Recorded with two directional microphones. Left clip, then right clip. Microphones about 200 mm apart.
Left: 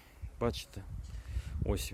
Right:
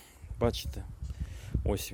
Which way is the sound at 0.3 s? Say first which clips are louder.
Right 4 dB; 15° right (ahead or behind).